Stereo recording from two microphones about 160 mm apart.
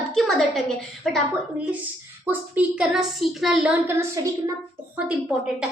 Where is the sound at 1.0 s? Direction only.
Centre (ahead or behind).